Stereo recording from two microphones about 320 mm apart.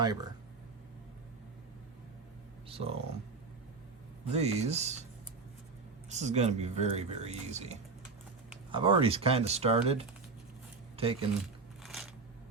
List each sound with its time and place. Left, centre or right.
0.0 s speech: centre
2.6 s speech: centre
4.3 s speech: centre
6.1 s speech: right
11.8 s crunch: centre